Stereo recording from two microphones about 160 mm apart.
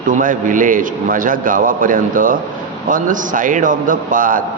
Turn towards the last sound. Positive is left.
turn(degrees=-60)  # may be behind; listen again after turning